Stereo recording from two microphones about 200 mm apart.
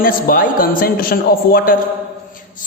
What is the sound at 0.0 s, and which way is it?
A man's voice, 45° left (ahead or behind).